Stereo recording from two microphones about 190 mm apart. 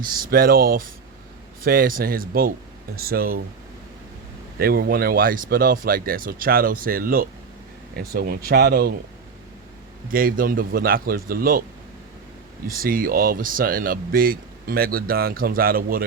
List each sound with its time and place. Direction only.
0.0 s speech: 50° right (ahead or behind)
4.6 s speech: 50° right (ahead or behind)
10.1 s speech: 50° right (ahead or behind)
12.6 s speech: 50° right (ahead or behind)